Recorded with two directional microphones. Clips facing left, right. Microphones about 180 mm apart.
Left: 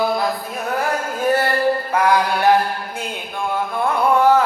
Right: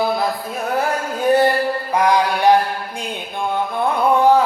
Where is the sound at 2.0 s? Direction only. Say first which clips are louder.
Right 3 dB; 15° right (ahead or behind).